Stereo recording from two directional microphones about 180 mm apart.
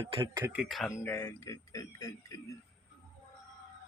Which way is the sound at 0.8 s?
10° left (ahead or behind).